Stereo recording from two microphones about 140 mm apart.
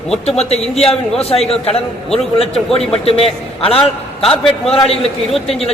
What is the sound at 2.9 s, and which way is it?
A man's voice, 45° left (ahead or behind).